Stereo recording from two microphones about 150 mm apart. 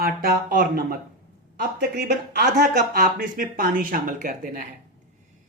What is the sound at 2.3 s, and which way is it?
Speech, 80° right.